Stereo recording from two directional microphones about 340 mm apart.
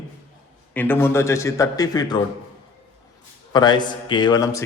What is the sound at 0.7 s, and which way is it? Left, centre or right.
Speech, centre.